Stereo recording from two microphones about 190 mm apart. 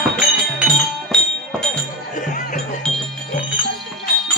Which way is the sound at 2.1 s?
40° left (ahead or behind).